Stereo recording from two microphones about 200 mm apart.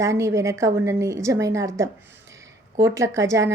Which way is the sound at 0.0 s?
15° right (ahead or behind).